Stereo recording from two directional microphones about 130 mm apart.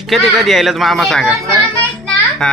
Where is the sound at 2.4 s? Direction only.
Centre (ahead or behind).